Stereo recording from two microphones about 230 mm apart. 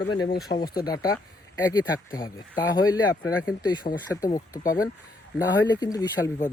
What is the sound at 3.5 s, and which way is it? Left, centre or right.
Speech, centre.